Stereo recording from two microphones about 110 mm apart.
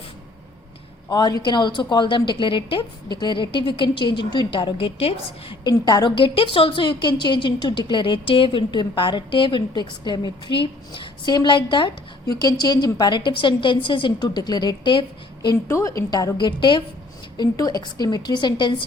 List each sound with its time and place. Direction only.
1.1 s a woman's voice: 40° left (ahead or behind); by 5.5 s 60° left (ahead or behind)
5.6 s a woman's voice: 40° left (ahead or behind)
15.6 s a woman's voice: 25° left (ahead or behind); by 18.9 s 45° left (ahead or behind)